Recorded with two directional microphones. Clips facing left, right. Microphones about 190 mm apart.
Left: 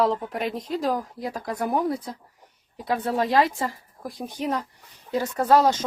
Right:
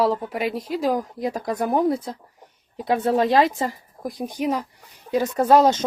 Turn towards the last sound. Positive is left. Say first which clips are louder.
# right 3 dB
turn(degrees=-20)  # may be behind; listen again after turning